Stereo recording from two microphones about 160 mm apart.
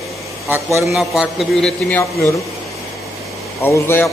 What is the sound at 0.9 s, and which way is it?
Speech, centre (ahead or behind).